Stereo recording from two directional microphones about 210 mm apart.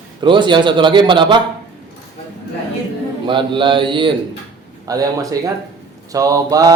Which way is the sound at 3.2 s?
25° right (ahead or behind).